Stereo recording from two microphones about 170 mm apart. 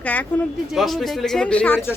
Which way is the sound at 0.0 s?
10° left (ahead or behind).